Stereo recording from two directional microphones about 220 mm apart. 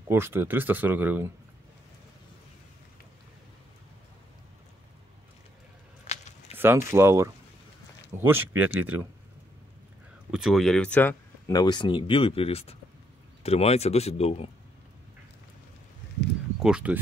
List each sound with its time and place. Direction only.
0.1 s speech: 10° right (ahead or behind)
6.0 s a sound: 30° left (ahead or behind)
6.5 s speech: 10° right (ahead or behind)
10.3 s speech: centre (ahead or behind); by 14.5 s 30° left (ahead or behind)
16.6 s speech: 5° right (ahead or behind)